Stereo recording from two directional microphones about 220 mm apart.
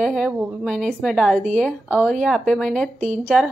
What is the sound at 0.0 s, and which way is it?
A woman's voice, centre (ahead or behind).